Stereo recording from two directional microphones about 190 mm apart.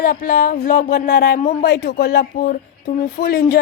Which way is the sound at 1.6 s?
55° left (ahead or behind).